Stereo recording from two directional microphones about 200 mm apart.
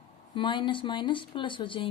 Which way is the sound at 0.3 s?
25° left (ahead or behind).